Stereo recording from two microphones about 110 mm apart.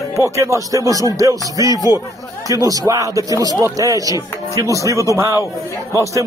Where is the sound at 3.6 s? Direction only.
30° right (ahead or behind).